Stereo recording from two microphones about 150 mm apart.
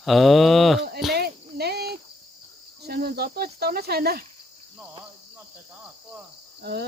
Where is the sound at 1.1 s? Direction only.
90° right.